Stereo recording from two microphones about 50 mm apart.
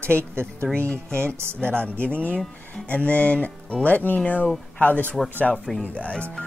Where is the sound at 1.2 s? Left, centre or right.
Right.